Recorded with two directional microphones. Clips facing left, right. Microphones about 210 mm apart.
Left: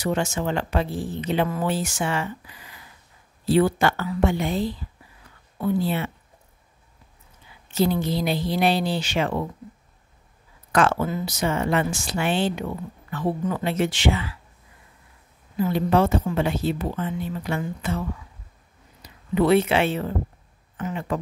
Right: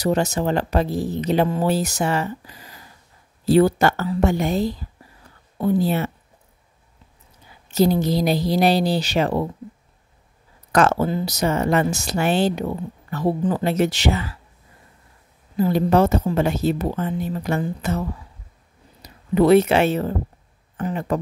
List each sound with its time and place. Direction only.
0.0 s speech: 35° right (ahead or behind)
7.7 s speech: 40° right (ahead or behind)
10.7 s speech: 40° right (ahead or behind)
15.5 s speech: 40° right (ahead or behind)
19.0 s speech: 40° right (ahead or behind)